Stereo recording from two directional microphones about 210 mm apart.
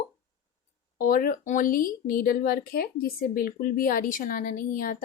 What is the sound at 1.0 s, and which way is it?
Speech, 40° left (ahead or behind).